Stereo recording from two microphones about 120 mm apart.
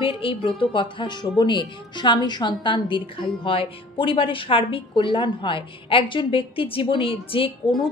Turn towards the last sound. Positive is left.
turn(degrees=50)  # may be behind; listen again after turning